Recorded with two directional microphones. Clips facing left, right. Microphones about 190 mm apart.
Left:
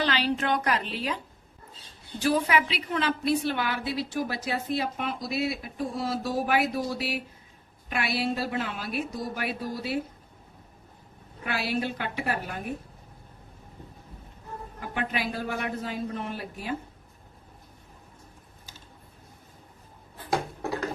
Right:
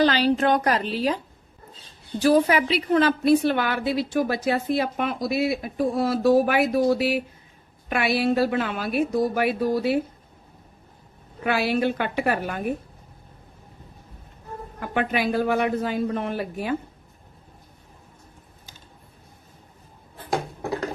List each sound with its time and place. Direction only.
0.0 s a woman's voice: 40° right (ahead or behind); by 6.6 s 60° right (ahead or behind)
7.9 s a woman's voice: 60° right (ahead or behind)
11.4 s a man's voice: 65° right (ahead or behind)
14.8 s a man's voice: 65° right (ahead or behind)